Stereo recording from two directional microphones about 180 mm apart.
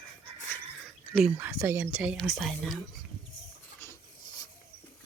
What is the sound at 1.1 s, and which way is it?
Speech, 10° right (ahead or behind).